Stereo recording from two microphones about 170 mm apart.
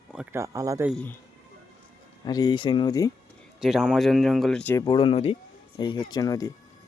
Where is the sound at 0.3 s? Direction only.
20° right (ahead or behind).